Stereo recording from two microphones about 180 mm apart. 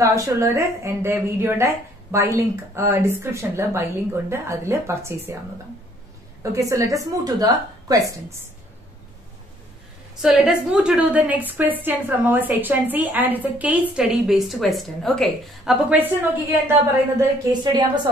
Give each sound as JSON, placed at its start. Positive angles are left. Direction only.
{"t": 0.0, "sound": "a woman's voice", "side_deg": -15}
{"t": 6.4, "sound": "a woman's voice", "side_deg": -15}
{"t": 10.2, "sound": "a woman's voice", "side_deg": -5}
{"t": 17.2, "sound": "a woman's voice", "side_deg": -25}